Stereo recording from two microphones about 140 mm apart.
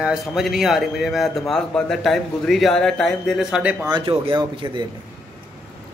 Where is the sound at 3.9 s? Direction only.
35° right (ahead or behind).